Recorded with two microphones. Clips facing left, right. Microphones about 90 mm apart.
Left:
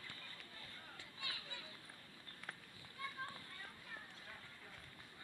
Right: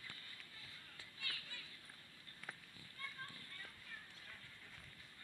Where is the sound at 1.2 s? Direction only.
15° left (ahead or behind).